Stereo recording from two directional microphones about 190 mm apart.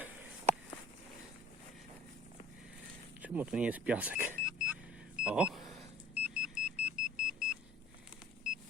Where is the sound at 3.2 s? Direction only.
5° right (ahead or behind).